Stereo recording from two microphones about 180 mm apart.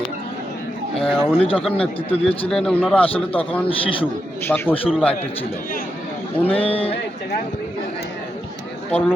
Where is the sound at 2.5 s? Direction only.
5° left (ahead or behind).